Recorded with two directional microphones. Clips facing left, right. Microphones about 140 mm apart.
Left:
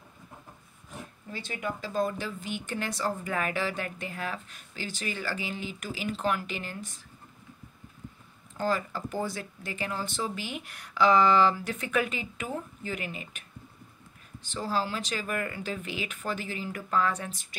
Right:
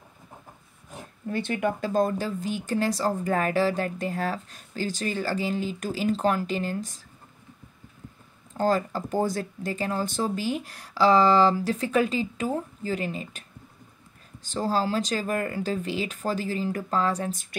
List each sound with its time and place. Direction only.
1.3 s speech: 60° right (ahead or behind); by 7.1 s 40° right (ahead or behind)
8.5 s speech: 40° right (ahead or behind)